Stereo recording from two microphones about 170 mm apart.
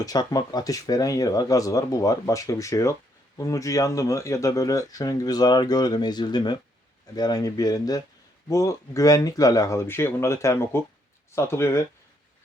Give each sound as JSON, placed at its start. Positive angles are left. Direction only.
{"t": 0.0, "sound": "speech", "side_deg": 20}